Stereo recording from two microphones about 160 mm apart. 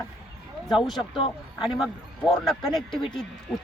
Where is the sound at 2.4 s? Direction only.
Centre (ahead or behind).